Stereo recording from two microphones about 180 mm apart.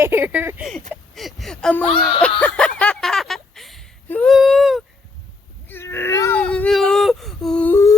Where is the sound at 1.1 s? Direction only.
Centre (ahead or behind).